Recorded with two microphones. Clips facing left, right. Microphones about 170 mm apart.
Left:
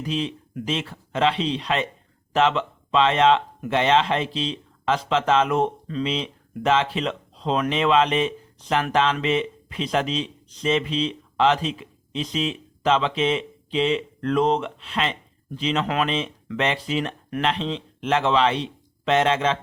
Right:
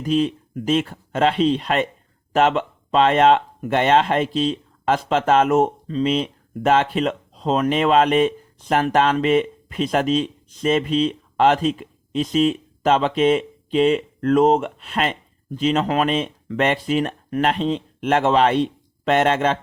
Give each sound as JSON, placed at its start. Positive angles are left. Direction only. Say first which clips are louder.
{"t": 0.0, "sound": "speech", "louder": "right 7 dB", "side_deg": -45}